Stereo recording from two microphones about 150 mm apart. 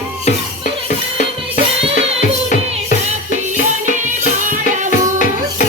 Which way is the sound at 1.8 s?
40° right (ahead or behind).